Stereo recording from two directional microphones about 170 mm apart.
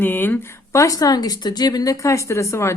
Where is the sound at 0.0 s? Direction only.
10° left (ahead or behind).